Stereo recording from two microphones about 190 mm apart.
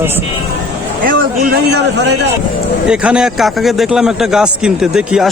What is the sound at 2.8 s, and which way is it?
A man's voice, 5° right (ahead or behind).